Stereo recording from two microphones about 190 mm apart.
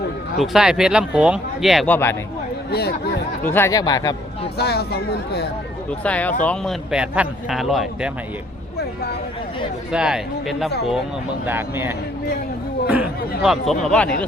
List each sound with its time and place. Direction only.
0.3 s speech: centre (ahead or behind)
2.7 s speech: 55° left (ahead or behind)
3.4 s speech: 10° left (ahead or behind)
4.5 s speech: 55° left (ahead or behind)
6.0 s speech: 5° left (ahead or behind)
6.9 s speech: 5° right (ahead or behind)
9.9 s speech: 5° right (ahead or behind)
13.4 s speech: centre (ahead or behind)